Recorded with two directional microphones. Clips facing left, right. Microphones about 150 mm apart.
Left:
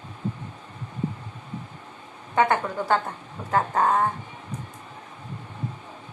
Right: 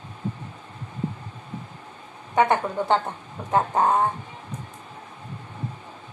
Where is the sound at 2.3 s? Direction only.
20° right (ahead or behind).